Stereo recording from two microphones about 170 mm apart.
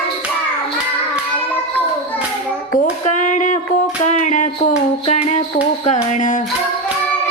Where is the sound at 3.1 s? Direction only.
45° left (ahead or behind).